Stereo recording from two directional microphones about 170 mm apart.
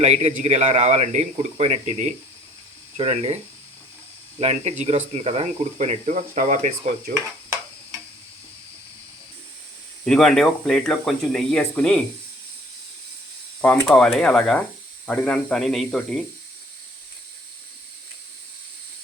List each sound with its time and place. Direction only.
0.0 s speech: 40° right (ahead or behind)
4.4 s speech: 40° right (ahead or behind)
10.1 s speech: centre (ahead or behind)
13.6 s speech: 5° left (ahead or behind)